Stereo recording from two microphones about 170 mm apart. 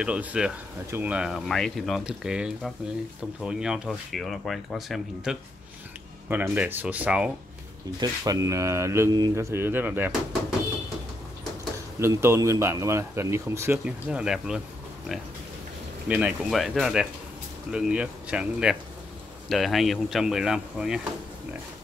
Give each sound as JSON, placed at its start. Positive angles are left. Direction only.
{"t": 0.0, "sound": "speech", "side_deg": -5}
{"t": 8.0, "sound": "speech", "side_deg": -20}
{"t": 12.0, "sound": "speech", "side_deg": -15}
{"t": 16.1, "sound": "speech", "side_deg": -5}